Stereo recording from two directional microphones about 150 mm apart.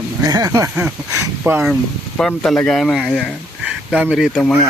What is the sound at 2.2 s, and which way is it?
Speech, 5° left (ahead or behind).